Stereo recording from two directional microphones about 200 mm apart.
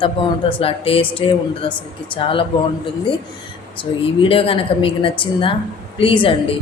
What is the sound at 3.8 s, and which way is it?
A woman's voice, 25° left (ahead or behind).